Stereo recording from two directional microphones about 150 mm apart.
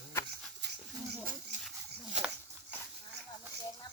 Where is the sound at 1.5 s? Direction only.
55° right (ahead or behind).